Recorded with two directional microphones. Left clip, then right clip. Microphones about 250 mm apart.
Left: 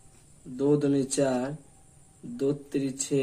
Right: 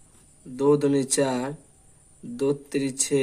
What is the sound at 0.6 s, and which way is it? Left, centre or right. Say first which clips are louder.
Speech: right 4 dB; right.